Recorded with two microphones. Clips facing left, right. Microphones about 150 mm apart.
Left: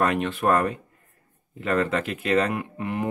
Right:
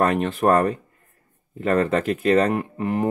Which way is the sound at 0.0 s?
40° right (ahead or behind).